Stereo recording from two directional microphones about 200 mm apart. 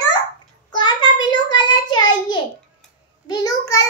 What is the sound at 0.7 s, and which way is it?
Child singing, 20° left (ahead or behind).